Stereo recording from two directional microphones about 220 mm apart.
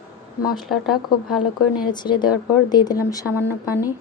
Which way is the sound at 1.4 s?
90° left.